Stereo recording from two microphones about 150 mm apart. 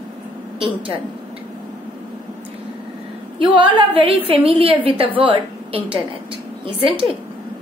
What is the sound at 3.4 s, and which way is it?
A woman's voice, 30° right (ahead or behind).